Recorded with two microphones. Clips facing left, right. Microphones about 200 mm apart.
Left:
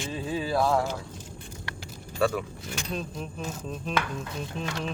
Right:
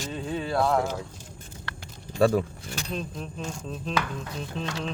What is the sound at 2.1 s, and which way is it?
Speech, 35° right (ahead or behind).